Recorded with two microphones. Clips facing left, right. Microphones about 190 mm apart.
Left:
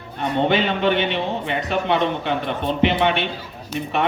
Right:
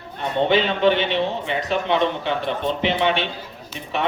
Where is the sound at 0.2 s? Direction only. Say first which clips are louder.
Even; 55° left (ahead or behind).